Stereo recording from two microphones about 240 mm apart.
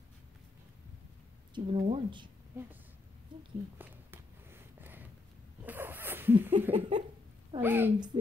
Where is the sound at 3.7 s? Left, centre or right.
Centre.